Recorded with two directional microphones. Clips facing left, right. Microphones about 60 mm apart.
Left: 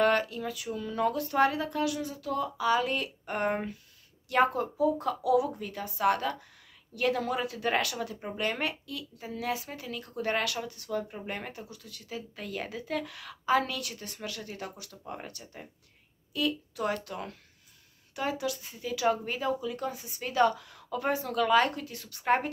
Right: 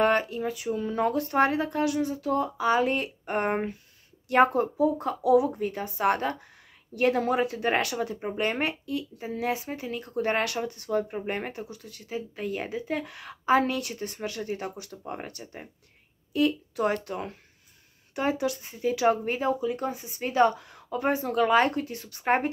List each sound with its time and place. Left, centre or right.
0.0 s speech: right